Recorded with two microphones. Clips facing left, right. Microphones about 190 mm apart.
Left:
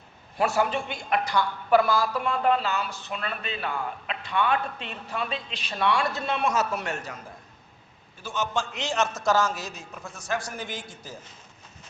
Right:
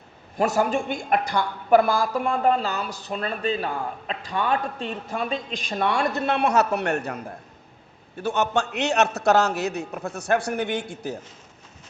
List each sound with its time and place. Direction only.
0.3 s a woman's voice: 45° right (ahead or behind); by 11.2 s 65° right (ahead or behind)